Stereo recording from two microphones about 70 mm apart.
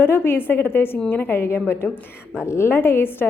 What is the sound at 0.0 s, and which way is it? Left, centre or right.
A woman's voice, left.